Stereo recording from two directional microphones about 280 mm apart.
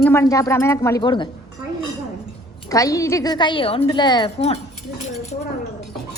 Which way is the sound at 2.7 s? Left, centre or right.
Centre.